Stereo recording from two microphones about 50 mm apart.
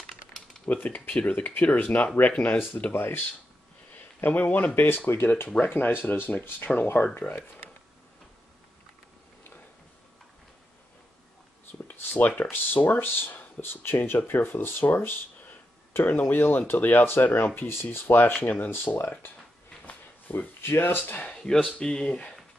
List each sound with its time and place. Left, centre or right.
0.8 s speech: left
2.9 s speech: left
3.9 s a sound: left
4.7 s speech: left
12.0 s speech: left
19.9 s a sound: left
21.0 s speech: left
21.3 s speech: centre